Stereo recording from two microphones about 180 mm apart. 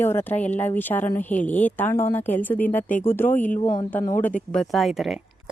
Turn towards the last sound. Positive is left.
turn(degrees=0)  # may be behind; listen again after turning